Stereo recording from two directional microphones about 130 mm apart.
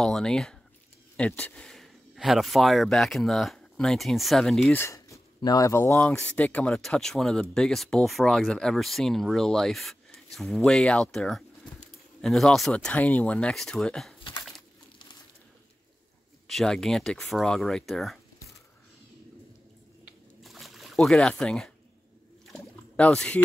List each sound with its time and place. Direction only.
0.0 s speech: 5° left (ahead or behind)
4.7 s speech: 25° left (ahead or behind)
5.9 s speech: 5° left (ahead or behind)
16.4 s speech: centre (ahead or behind)
20.4 s a sound: centre (ahead or behind)